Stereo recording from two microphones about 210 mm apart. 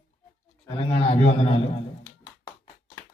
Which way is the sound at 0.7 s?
25° left (ahead or behind).